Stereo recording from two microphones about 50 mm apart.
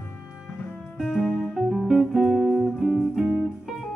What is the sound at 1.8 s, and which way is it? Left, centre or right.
Guitar, centre.